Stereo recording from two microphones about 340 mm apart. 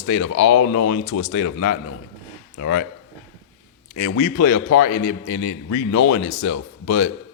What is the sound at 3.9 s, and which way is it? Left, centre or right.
Speech, left.